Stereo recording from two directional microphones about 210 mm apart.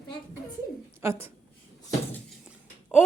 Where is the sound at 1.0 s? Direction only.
10° right (ahead or behind).